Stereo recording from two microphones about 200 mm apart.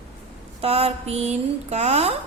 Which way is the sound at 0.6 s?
30° right (ahead or behind).